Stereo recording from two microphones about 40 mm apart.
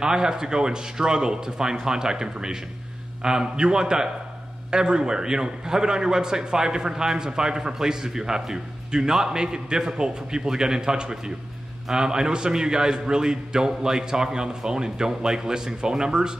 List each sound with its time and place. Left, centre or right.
0.0 s a man's voice: centre